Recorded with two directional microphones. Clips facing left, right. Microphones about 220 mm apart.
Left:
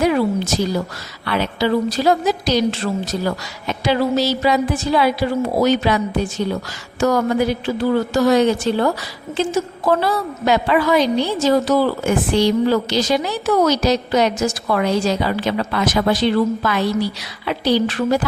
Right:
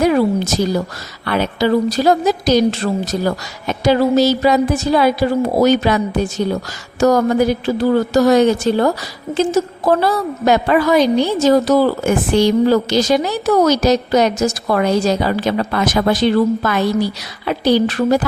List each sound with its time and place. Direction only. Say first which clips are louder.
0.0 s a woman's voice: right 3 dB; 40° right (ahead or behind)